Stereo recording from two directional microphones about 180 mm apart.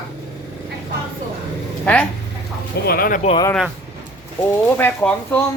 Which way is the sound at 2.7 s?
60° left (ahead or behind).